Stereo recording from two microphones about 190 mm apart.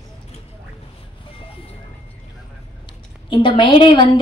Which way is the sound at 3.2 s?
25° left (ahead or behind).